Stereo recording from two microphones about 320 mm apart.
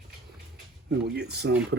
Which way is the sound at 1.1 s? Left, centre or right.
Right.